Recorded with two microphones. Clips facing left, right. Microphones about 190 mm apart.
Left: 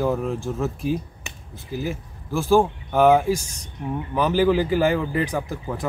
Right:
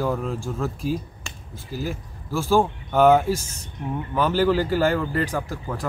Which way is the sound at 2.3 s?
Centre (ahead or behind).